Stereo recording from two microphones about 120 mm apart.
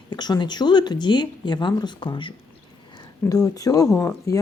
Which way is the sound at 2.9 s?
30° left (ahead or behind).